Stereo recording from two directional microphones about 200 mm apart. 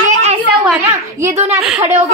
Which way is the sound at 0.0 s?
35° right (ahead or behind).